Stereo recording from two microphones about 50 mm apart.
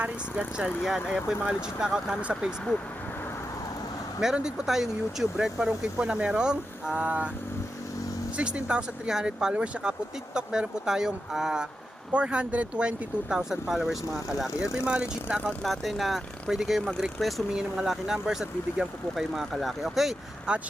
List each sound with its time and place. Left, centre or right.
0.0 s speech: centre
0.8 s speech: centre
4.4 s speech: centre
8.4 s speech: right
13.2 s speech: centre
14.6 s speech: centre
15.6 s speech: centre
17.5 s speech: centre
20.5 s speech: centre